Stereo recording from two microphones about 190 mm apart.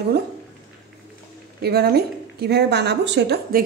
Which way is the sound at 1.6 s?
55° right (ahead or behind).